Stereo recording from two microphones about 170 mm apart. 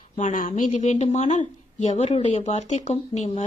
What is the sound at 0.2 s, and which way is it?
A woman's voice, 45° left (ahead or behind).